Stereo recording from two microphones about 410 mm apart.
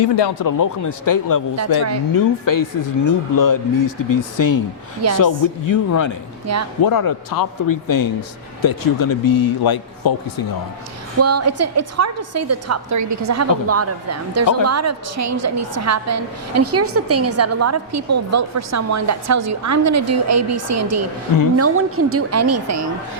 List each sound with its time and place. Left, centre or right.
0.0 s speech: left
0.4 s speech: left
6.5 s a woman's voice: right
6.8 s speech: left
11.2 s a woman's voice: right